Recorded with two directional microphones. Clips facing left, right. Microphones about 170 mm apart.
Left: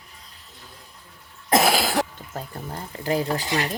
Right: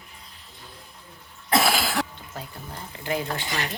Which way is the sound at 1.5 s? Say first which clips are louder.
Left 3 dB; 40° left (ahead or behind).